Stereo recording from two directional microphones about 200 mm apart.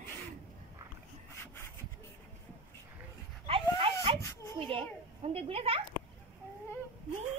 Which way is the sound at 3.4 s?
25° right (ahead or behind).